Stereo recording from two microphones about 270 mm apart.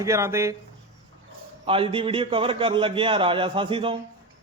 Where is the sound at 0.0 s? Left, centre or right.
Centre.